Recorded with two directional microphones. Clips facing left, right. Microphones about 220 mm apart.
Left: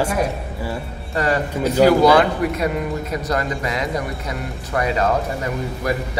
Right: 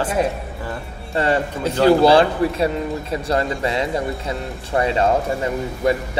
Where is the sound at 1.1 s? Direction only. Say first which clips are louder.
Right 1 dB; 30° right (ahead or behind).